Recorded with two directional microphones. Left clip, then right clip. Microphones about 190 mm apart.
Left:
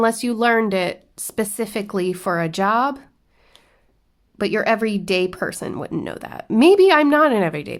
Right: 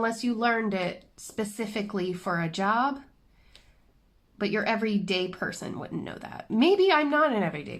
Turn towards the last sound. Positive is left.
turn(degrees=40)  # may be behind; listen again after turning